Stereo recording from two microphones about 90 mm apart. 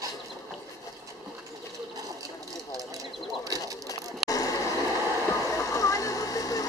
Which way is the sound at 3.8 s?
40° left (ahead or behind).